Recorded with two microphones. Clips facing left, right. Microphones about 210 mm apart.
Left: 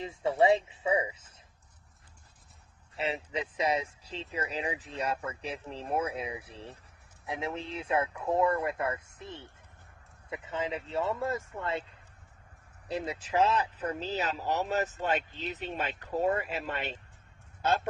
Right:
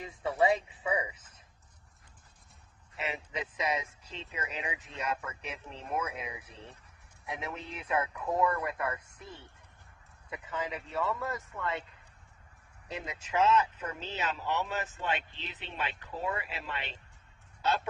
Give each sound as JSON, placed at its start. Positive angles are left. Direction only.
{"t": 0.0, "sound": "speech", "side_deg": 25}
{"t": 2.9, "sound": "speech", "side_deg": 30}
{"t": 12.9, "sound": "speech", "side_deg": 35}